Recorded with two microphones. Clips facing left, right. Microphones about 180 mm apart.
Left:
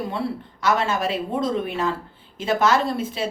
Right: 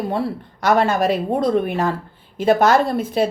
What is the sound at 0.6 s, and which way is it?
Speech, 60° right (ahead or behind).